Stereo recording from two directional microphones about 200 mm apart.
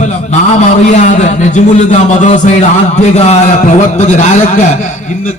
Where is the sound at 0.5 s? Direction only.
35° left (ahead or behind).